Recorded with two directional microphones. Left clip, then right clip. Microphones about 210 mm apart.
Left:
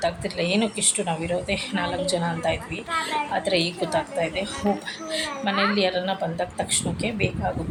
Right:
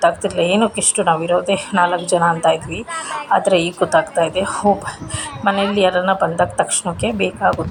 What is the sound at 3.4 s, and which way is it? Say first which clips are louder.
A woman's voice: right 8 dB; 20° right (ahead or behind).